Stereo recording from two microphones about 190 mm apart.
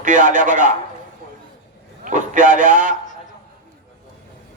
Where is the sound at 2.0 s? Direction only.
45° right (ahead or behind).